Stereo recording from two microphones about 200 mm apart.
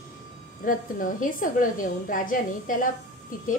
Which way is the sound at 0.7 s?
40° left (ahead or behind).